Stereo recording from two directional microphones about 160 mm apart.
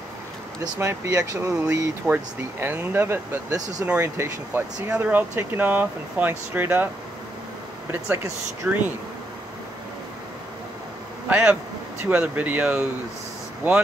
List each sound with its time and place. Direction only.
0.7 s speech: 15° right (ahead or behind)
7.9 s speech: 15° right (ahead or behind)
11.2 s speech: 10° right (ahead or behind)